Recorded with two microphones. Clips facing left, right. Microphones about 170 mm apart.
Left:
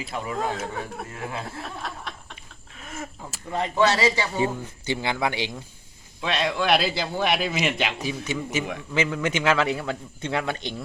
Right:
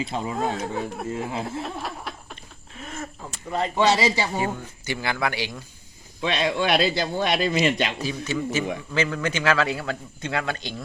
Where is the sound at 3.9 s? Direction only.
10° right (ahead or behind).